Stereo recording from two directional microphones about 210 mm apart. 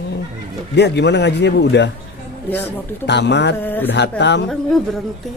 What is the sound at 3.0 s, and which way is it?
Speech, 55° left (ahead or behind).